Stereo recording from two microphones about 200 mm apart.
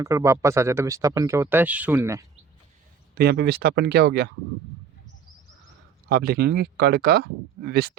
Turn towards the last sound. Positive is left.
turn(degrees=-60)  # may be behind; listen again after turning